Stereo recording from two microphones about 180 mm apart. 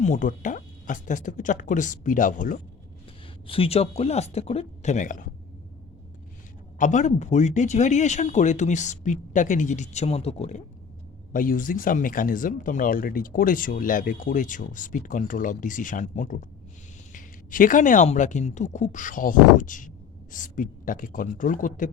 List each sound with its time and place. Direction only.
0.0 s speech: 45° left (ahead or behind)
3.4 s speech: 30° left (ahead or behind)
6.7 s speech: 45° left (ahead or behind)
11.3 s speech: 50° left (ahead or behind)